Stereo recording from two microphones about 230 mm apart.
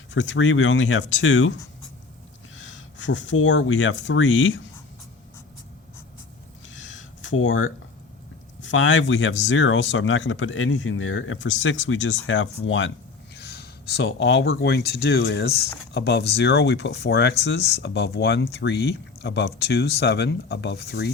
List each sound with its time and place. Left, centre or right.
0.1 s speech: left
2.6 s speech: left
6.7 s a sound: left
8.6 s speech: left
13.3 s speech: left